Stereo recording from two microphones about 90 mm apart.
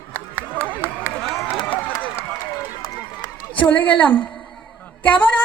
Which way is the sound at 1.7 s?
15° left (ahead or behind).